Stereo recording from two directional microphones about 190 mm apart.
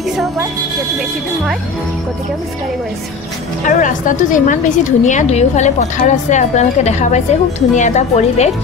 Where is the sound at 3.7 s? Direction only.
45° left (ahead or behind).